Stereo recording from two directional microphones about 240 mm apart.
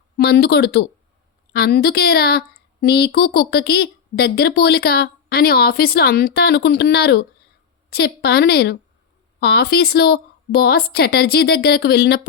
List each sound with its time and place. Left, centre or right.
0.2 s speech: left